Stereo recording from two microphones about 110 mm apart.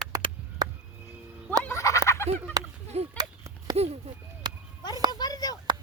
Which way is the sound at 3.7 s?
70° right (ahead or behind).